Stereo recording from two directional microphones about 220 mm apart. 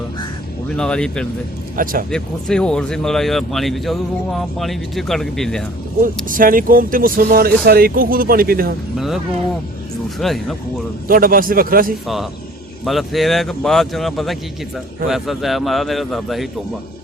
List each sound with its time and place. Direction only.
0.8 s speech: 5° left (ahead or behind)
1.7 s speech: 40° right (ahead or behind)
2.0 s speech: 5° left (ahead or behind)
6.2 s speech: 40° right (ahead or behind)
9.0 s speech: centre (ahead or behind)
11.1 s speech: 40° right (ahead or behind)
12.0 s speech: centre (ahead or behind)